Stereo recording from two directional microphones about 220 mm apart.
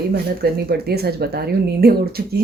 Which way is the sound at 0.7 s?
45° right (ahead or behind).